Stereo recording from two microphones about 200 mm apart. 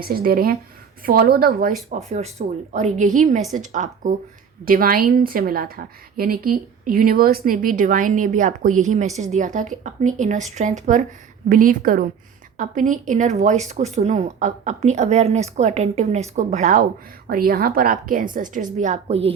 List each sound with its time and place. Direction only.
0.0 s a woman's voice: 50° right (ahead or behind)
1.9 s a woman's voice: 35° right (ahead or behind)
17.2 s a woman's voice: 50° right (ahead or behind); by 19.3 s 30° right (ahead or behind)